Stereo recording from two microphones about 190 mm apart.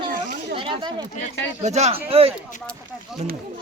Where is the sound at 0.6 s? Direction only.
25° right (ahead or behind).